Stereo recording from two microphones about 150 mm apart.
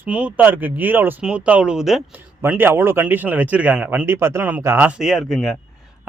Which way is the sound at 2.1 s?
15° right (ahead or behind).